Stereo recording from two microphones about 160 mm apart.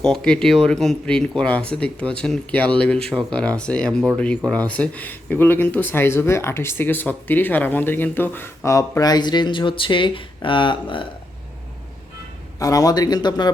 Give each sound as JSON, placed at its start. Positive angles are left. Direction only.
{"t": 0.0, "sound": "speech", "side_deg": 5}
{"t": 12.5, "sound": "speech", "side_deg": 20}